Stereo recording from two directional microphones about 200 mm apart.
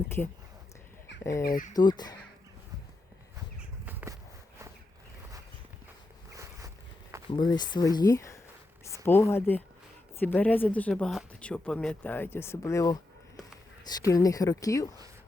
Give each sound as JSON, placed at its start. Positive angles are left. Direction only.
{"t": 1.2, "sound": "speech", "side_deg": 15}
{"t": 1.5, "sound": "speech", "side_deg": 40}
{"t": 1.7, "sound": "speech", "side_deg": 20}
{"t": 3.8, "sound": "a sound", "side_deg": -15}
{"t": 6.3, "sound": "boat", "side_deg": -15}
{"t": 7.3, "sound": "speech", "side_deg": 20}